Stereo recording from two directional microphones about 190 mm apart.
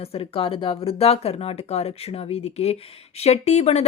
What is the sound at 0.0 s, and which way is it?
Speech, 30° left (ahead or behind).